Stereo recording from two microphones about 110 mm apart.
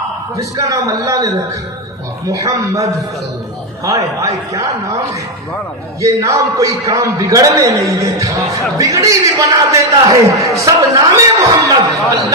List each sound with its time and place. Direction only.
0.5 s a man's voice: 30° right (ahead or behind)
6.0 s a man's voice: 30° right (ahead or behind)